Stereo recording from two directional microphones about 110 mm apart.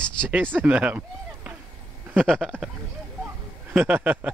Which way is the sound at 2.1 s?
5° left (ahead or behind).